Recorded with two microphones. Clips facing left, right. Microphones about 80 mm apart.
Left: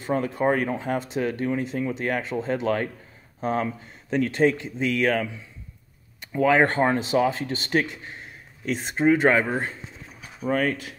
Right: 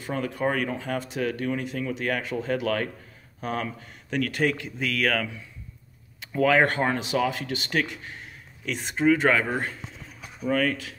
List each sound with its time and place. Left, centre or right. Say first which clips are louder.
0.0 s speech: left 4 dB; left
8.6 s speech: left 1 dB; left
10.4 s speech: left 1 dB; left